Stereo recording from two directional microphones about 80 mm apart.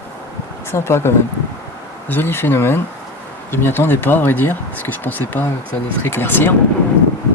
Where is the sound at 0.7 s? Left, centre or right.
Left.